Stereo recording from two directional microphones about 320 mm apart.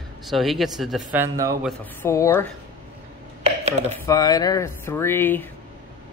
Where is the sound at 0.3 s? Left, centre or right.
Centre.